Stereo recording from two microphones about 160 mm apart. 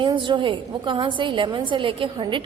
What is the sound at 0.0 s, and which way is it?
A woman's voice, 30° right (ahead or behind).